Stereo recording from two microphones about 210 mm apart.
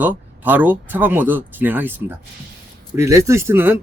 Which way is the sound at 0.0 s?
10° right (ahead or behind).